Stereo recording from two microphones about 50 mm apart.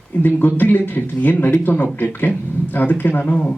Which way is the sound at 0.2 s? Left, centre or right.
Left.